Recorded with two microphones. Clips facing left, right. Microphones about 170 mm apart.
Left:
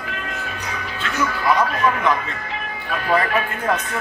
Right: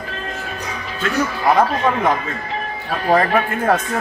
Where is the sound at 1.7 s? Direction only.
30° right (ahead or behind).